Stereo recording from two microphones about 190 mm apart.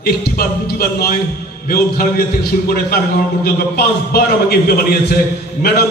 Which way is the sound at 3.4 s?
55° left (ahead or behind).